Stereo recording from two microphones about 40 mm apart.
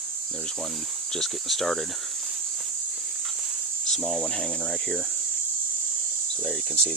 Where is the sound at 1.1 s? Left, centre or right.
Centre.